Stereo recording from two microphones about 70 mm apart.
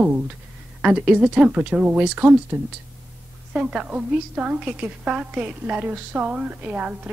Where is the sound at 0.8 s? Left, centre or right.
Centre.